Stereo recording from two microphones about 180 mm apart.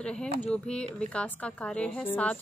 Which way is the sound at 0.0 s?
5° left (ahead or behind).